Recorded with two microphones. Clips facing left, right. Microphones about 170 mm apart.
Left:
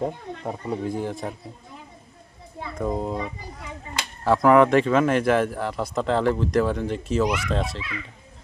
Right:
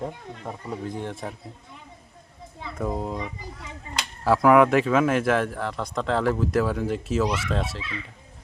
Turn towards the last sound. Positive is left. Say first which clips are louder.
# left 2 dB
turn(degrees=-5)  # may be behind; listen again after turning